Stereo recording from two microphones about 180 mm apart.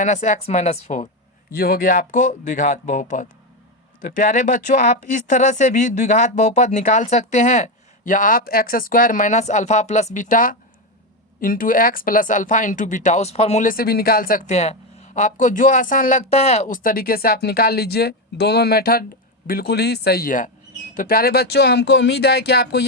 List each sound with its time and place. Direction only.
0.0 s speech: 40° left (ahead or behind)
1.5 s speech: 55° left (ahead or behind)
6.7 s speech: 40° left (ahead or behind)
13.7 s speech: 55° left (ahead or behind)